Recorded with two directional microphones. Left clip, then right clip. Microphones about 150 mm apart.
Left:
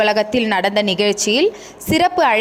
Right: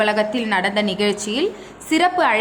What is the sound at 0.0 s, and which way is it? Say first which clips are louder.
A woman's voice: left 3 dB; 45° left (ahead or behind).